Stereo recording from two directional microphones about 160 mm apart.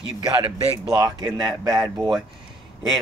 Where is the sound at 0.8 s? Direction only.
25° right (ahead or behind).